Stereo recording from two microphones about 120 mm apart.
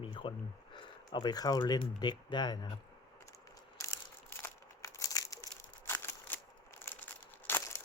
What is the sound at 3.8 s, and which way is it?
Crumpling, 20° left (ahead or behind).